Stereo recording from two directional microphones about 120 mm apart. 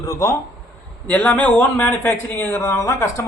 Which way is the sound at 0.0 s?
25° left (ahead or behind).